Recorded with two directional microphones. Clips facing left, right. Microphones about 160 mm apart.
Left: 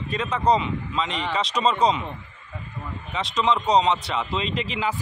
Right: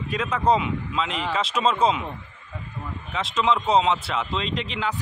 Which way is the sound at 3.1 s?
Centre (ahead or behind).